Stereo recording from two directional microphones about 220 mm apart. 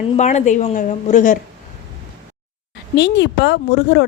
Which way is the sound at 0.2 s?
30° left (ahead or behind).